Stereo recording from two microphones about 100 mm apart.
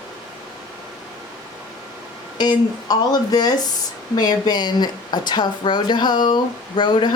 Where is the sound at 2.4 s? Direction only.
40° left (ahead or behind).